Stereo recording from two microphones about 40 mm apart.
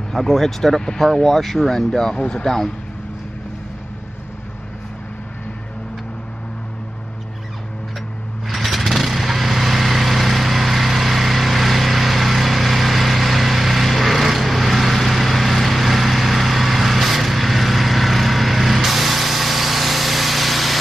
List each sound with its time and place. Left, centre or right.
0.1 s speech: centre
2.1 s speech: left
8.5 s lawn mower: centre